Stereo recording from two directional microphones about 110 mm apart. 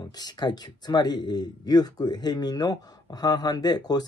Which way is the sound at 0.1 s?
40° left (ahead or behind).